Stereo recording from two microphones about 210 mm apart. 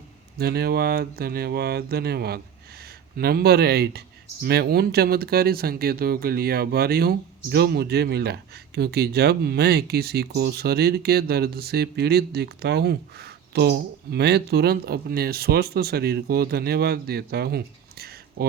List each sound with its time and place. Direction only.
0.3 s speech: 50° right (ahead or behind)